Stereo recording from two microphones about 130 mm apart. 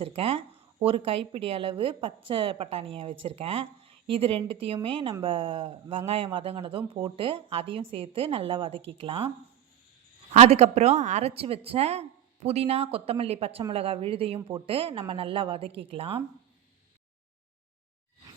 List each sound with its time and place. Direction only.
0.0 s speech: 45° right (ahead or behind)
10.3 s speech: 55° right (ahead or behind)